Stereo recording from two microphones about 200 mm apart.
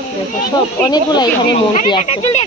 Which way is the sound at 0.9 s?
20° left (ahead or behind).